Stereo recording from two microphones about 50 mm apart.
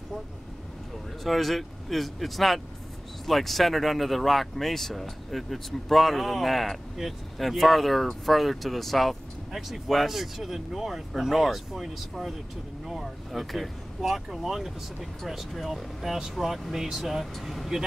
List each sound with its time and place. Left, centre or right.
1.2 s speech: centre